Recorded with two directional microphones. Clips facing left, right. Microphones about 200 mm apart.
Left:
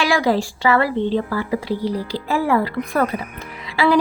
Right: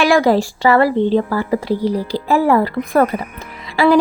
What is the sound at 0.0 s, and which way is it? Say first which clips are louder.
A woman's voice: right 5 dB; 50° right (ahead or behind).